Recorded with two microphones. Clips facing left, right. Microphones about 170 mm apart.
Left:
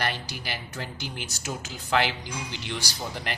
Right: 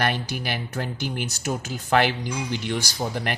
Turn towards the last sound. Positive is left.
turn(degrees=-55)  # may be behind; listen again after turning